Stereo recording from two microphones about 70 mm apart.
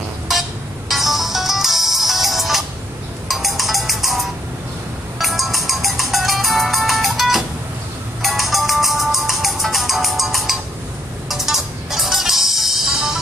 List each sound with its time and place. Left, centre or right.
0.3 s music: centre